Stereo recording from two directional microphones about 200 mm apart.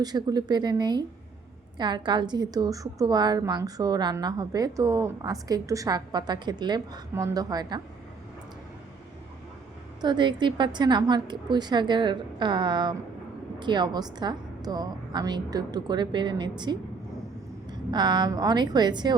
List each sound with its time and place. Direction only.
0.0 s a woman's voice: 20° right (ahead or behind)
10.0 s a woman's voice: 20° right (ahead or behind)